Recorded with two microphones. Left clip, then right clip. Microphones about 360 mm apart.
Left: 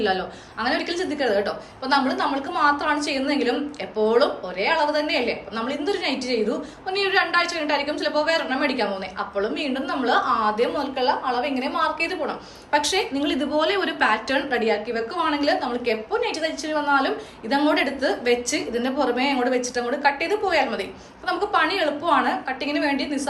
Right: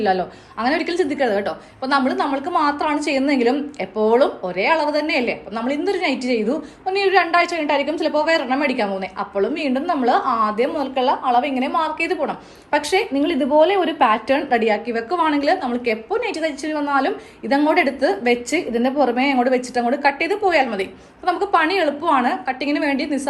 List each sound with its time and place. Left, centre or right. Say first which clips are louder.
0.0 s a woman's voice: right 4 dB; centre